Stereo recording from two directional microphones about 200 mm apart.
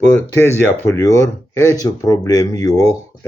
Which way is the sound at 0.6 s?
15° left (ahead or behind).